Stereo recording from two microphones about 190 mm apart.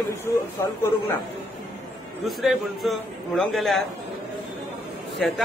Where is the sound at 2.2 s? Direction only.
Centre (ahead or behind).